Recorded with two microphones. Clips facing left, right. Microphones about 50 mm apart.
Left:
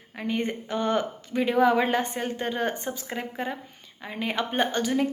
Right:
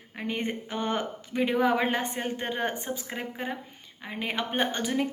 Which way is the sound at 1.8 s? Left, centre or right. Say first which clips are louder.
Left 2 dB; right.